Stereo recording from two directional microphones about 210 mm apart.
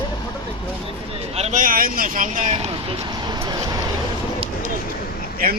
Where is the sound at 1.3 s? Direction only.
30° right (ahead or behind).